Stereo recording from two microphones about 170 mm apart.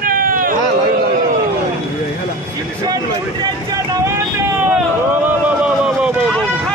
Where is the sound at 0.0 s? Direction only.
55° right (ahead or behind).